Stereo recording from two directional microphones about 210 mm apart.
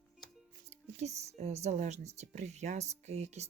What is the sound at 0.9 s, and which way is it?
Speech, 30° right (ahead or behind).